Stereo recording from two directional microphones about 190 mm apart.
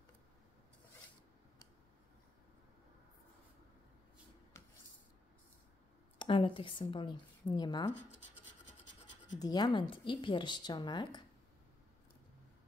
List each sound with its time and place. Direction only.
4.6 s writing: 15° left (ahead or behind)
6.1 s speech: 25° left (ahead or behind)
9.4 s speech: 20° left (ahead or behind)